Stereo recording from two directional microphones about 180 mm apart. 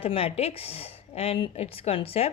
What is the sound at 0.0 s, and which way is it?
Speech, 30° left (ahead or behind).